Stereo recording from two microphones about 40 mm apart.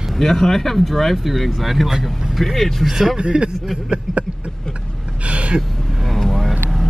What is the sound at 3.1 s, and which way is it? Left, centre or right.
Speech, right.